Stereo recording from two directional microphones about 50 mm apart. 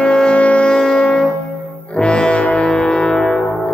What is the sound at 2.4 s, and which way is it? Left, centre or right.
Music, left.